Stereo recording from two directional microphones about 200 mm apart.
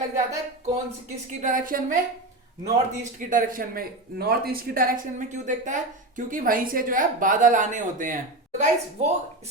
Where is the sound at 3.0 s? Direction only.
40° right (ahead or behind).